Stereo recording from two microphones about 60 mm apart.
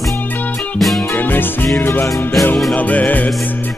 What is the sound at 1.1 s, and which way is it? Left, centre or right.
Music, left.